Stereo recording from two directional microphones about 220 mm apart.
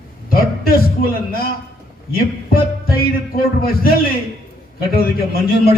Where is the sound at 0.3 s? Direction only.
40° left (ahead or behind).